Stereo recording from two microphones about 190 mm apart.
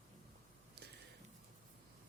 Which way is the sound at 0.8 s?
60° right (ahead or behind).